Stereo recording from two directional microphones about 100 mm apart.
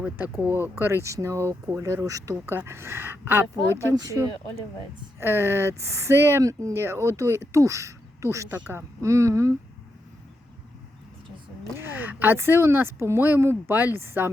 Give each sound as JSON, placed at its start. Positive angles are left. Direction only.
{"t": 0.0, "sound": "speech", "side_deg": -20}
{"t": 3.8, "sound": "speech", "side_deg": -30}
{"t": 8.4, "sound": "speech", "side_deg": -15}
{"t": 9.0, "sound": "speech", "side_deg": -30}
{"t": 11.8, "sound": "speech", "side_deg": -20}